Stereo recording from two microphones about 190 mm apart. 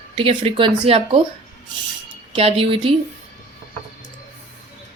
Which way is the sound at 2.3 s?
30° right (ahead or behind).